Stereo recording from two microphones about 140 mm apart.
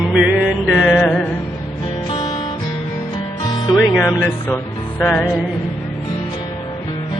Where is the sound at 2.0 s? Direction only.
35° left (ahead or behind).